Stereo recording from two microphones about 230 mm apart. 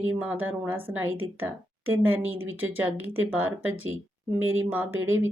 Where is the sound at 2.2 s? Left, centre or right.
Right.